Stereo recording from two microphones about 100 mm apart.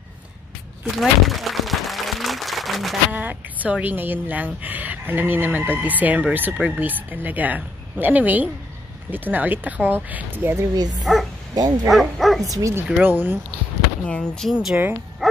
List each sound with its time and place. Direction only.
0.9 s applause: centre (ahead or behind)
3.1 s a woman's voice: 15° right (ahead or behind)
11.1 s speech: centre (ahead or behind)
11.5 s speech: 40° right (ahead or behind)
11.9 s speech: centre (ahead or behind)
12.4 s speech: 35° right (ahead or behind)
13.0 s speech: 20° right (ahead or behind)
14.0 s speech: 10° left (ahead or behind)
14.5 s speech: 5° right (ahead or behind)